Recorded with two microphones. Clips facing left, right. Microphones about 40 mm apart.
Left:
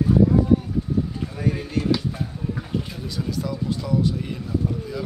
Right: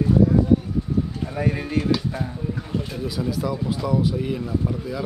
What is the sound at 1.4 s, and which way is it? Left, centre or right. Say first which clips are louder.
Speech: right 1 dB; centre.